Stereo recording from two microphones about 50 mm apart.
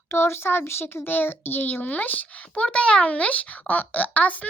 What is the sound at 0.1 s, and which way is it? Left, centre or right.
Speech, left.